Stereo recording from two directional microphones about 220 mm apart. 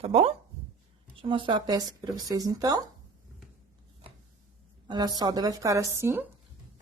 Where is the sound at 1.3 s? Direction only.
20° right (ahead or behind).